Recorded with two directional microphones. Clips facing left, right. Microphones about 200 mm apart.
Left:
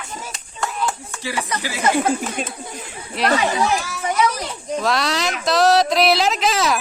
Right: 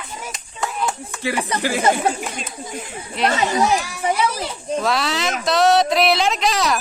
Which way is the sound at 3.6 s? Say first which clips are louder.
Right 2 dB; 15° right (ahead or behind).